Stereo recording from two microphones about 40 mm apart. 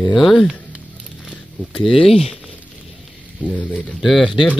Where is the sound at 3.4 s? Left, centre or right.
Left.